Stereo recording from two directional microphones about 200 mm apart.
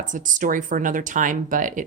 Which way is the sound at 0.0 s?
40° right (ahead or behind).